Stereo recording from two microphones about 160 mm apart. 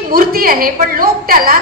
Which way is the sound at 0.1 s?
65° right (ahead or behind).